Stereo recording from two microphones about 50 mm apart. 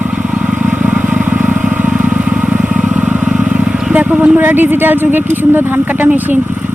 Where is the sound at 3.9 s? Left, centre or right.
Right.